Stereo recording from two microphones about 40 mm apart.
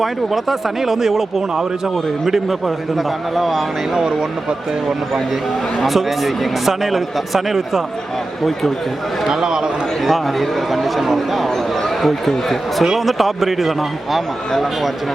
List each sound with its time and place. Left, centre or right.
0.0 s speech: centre
3.9 s speech: centre
5.8 s speech: centre
9.3 s speech: centre
10.0 s speech: centre